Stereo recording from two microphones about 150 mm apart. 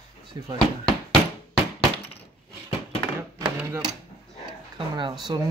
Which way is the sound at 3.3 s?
25° right (ahead or behind).